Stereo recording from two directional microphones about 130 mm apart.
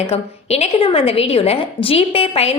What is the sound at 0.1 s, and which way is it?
A woman's voice, 50° left (ahead or behind).